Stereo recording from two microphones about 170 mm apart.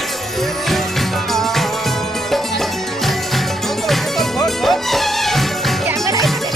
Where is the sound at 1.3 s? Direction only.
Centre (ahead or behind).